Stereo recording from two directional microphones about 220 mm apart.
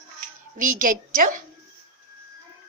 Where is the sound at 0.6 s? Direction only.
40° right (ahead or behind).